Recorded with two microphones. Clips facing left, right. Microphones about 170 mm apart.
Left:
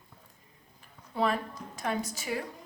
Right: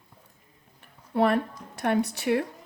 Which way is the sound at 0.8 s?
65° right (ahead or behind).